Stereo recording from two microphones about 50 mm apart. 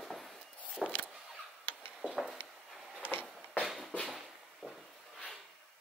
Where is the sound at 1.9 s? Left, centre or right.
Centre.